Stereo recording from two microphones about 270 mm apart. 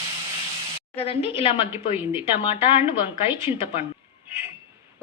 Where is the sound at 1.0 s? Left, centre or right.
Left.